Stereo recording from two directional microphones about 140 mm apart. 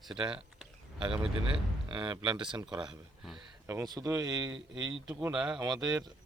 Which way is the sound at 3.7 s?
25° right (ahead or behind).